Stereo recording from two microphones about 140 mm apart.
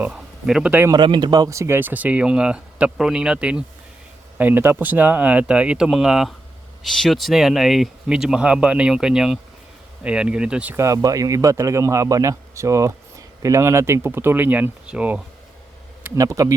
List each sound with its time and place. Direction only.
0.0 s a man's voice: 5° right (ahead or behind)
0.9 s speech: 35° right (ahead or behind); by 10.8 s 10° right (ahead or behind)
10.8 s speech: 25° right (ahead or behind)
16.0 s speech: 20° right (ahead or behind)